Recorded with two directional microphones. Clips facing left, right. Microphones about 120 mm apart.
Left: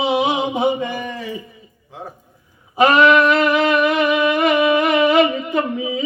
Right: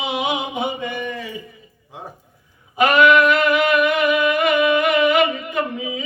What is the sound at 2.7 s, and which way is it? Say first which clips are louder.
Music: left 1 dB; 30° left (ahead or behind).